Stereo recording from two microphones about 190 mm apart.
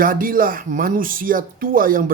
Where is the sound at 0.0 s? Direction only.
45° right (ahead or behind).